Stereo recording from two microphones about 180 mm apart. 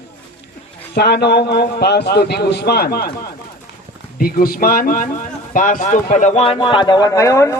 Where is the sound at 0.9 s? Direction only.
65° left (ahead or behind).